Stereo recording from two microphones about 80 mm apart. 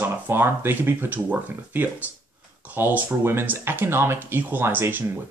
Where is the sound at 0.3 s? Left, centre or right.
Right.